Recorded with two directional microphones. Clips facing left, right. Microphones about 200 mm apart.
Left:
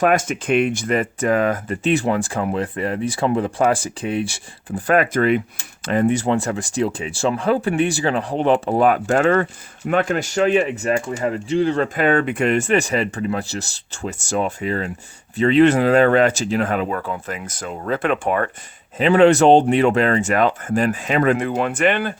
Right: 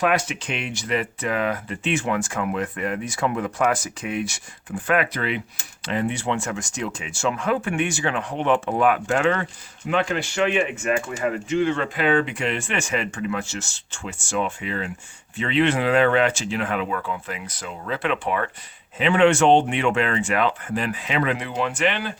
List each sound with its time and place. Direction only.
0.0 s speech: 45° left (ahead or behind)